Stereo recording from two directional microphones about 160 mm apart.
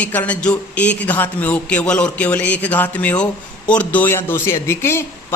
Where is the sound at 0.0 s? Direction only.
10° left (ahead or behind).